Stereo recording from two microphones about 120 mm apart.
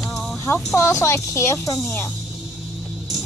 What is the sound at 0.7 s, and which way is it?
Speech, 25° left (ahead or behind).